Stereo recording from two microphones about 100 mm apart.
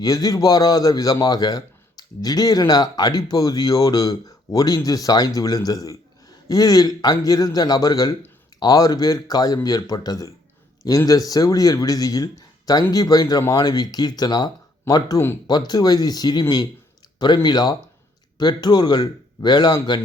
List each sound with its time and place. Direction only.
0.0 s a man's voice: 40° left (ahead or behind)